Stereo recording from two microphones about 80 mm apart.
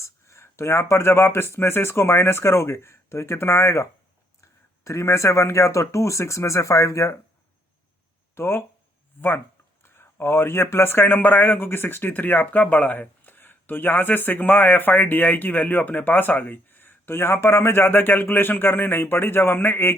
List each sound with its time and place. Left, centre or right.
0.0 s speech: left
8.4 s speech: left
9.8 s speech: left